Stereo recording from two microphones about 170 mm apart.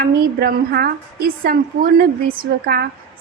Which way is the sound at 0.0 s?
65° right (ahead or behind).